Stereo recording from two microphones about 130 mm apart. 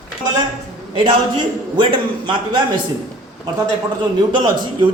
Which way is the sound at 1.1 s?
35° right (ahead or behind).